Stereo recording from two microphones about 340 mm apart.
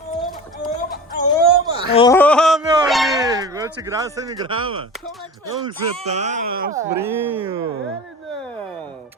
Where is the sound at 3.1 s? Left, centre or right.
Centre.